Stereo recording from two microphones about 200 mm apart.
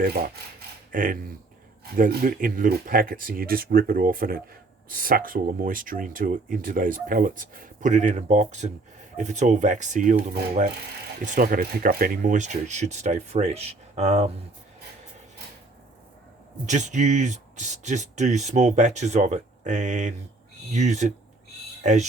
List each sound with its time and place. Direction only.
0.0 s speech: 45° right (ahead or behind)
16.6 s speech: 35° right (ahead or behind)